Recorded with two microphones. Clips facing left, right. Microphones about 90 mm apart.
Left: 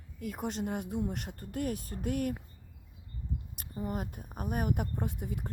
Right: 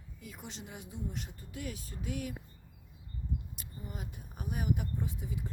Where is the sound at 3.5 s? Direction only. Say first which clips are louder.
Left 9 dB; 55° left (ahead or behind).